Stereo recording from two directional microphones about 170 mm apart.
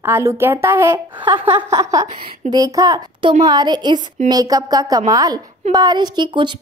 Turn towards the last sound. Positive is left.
turn(degrees=-25)  # may be behind; listen again after turning